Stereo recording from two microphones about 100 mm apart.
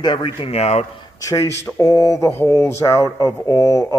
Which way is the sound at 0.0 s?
50° left (ahead or behind).